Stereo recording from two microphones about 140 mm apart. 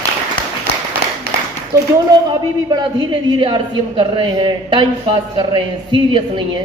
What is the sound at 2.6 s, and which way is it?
A man's voice, 30° right (ahead or behind).